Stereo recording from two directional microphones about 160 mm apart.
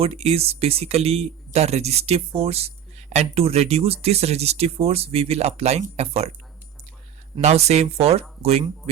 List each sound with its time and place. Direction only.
0.0 s speech: 40° right (ahead or behind)
7.4 s speech: 40° right (ahead or behind)